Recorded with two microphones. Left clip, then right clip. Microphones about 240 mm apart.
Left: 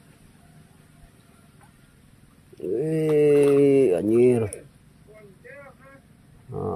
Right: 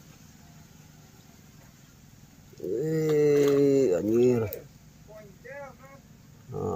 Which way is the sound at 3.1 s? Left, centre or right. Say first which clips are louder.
Left 5 dB; left.